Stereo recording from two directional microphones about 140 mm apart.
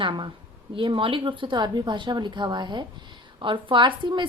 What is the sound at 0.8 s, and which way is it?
A woman's voice, 40° right (ahead or behind).